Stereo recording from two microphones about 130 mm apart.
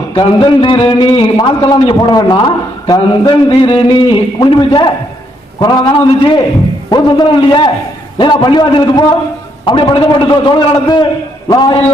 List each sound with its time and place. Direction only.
0.2 s a man's voice: 40° left (ahead or behind)